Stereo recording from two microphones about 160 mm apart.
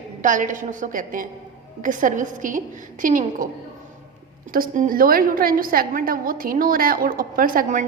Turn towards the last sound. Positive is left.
turn(degrees=-60)  # may be behind; listen again after turning